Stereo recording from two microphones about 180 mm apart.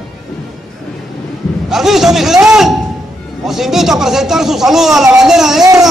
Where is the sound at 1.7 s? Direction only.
Centre (ahead or behind).